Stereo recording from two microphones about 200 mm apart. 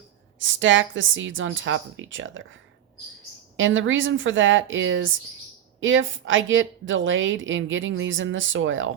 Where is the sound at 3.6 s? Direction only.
75° right (ahead or behind).